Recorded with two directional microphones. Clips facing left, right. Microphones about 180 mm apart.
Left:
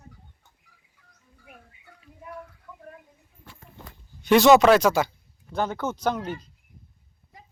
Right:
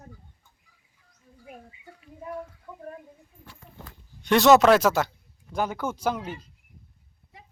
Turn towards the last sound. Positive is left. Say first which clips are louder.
# left 2 dB
turn(degrees=-5)  # may be behind; listen again after turning